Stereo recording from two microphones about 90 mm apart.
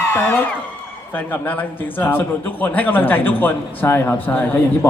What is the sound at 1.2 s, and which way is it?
Speech, 20° left (ahead or behind).